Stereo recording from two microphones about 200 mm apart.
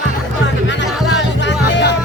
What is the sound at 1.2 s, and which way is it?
Music, 60° left (ahead or behind).